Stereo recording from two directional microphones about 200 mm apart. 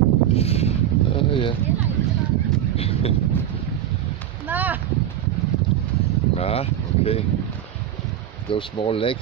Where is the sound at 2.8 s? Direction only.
30° left (ahead or behind).